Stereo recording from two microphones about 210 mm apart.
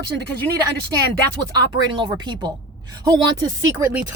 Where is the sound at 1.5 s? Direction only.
20° right (ahead or behind).